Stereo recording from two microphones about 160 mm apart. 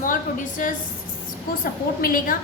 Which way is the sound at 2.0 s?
65° left (ahead or behind).